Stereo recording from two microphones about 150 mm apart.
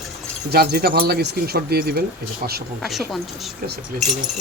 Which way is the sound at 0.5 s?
90° right.